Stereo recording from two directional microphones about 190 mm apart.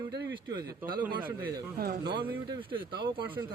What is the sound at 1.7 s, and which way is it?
Speech, 55° right (ahead or behind).